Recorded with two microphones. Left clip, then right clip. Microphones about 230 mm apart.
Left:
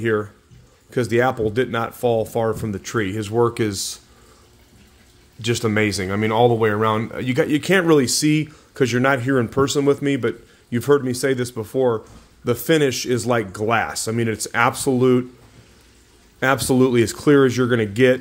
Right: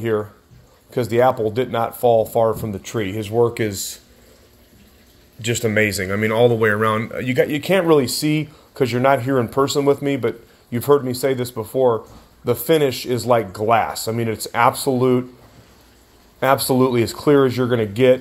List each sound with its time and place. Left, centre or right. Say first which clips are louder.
1.1 s speech: right 3 dB; left
5.4 s speech: right 2 dB; left
16.3 s speech: right 1 dB; left